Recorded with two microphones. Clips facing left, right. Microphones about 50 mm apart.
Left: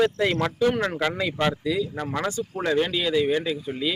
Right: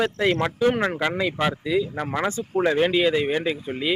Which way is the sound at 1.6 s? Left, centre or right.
Right.